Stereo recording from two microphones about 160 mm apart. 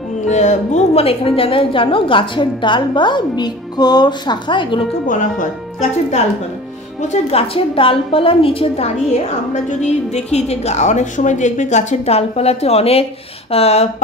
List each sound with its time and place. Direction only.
0.3 s a woman's voice: 45° left (ahead or behind); by 4.8 s 30° left (ahead or behind)
7.0 s a woman's voice: 40° left (ahead or behind)